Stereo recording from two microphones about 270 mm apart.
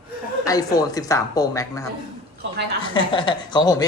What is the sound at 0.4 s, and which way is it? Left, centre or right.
Speech, centre.